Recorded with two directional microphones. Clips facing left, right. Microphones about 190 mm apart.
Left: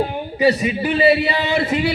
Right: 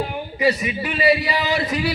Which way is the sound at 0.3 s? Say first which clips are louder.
Left 4 dB; 30° left (ahead or behind).